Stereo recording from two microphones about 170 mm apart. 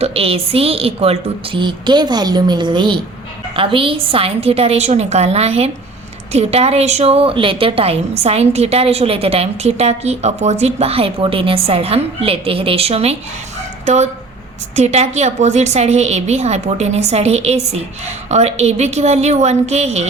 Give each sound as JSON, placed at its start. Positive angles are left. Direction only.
{"t": 0.0, "sound": "a woman's voice", "side_deg": -35}